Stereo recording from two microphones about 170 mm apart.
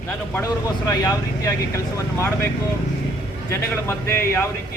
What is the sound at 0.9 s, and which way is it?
Speech, 20° left (ahead or behind).